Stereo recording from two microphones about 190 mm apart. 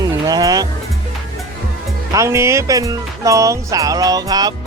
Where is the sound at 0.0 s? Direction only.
20° right (ahead or behind).